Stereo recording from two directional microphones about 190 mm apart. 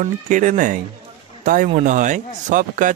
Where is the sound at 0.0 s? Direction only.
45° right (ahead or behind).